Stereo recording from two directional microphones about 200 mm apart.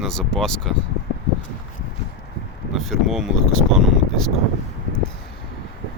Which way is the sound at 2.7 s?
Centre (ahead or behind).